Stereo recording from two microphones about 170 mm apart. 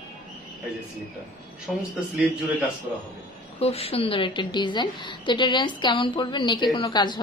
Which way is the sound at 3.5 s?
35° left (ahead or behind).